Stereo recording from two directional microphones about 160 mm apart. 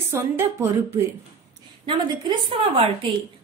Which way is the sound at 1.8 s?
35° right (ahead or behind).